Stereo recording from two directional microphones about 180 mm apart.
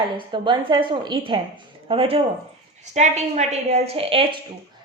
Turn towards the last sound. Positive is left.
turn(degrees=-30)  # may be behind; listen again after turning